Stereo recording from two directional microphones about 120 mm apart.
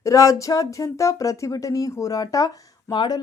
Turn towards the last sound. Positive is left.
turn(degrees=40)  # may be behind; listen again after turning